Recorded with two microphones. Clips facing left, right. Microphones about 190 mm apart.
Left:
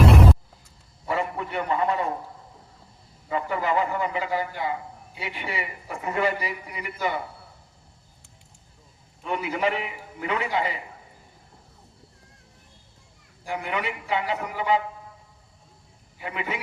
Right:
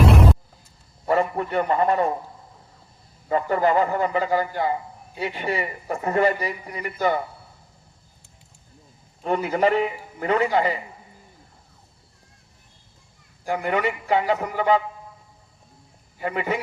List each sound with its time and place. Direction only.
0.0 s a sound: centre (ahead or behind)
1.0 s a man's voice: 45° right (ahead or behind)
3.2 s a man's voice: 40° right (ahead or behind)
9.2 s a man's voice: 45° right (ahead or behind)
13.4 s a man's voice: 45° right (ahead or behind)
16.1 s a man's voice: 45° right (ahead or behind)